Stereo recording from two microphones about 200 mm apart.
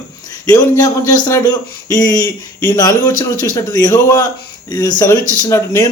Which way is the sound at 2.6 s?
20° left (ahead or behind).